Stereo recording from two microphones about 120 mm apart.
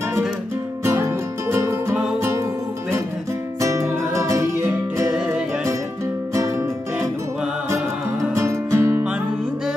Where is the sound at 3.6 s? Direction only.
25° right (ahead or behind).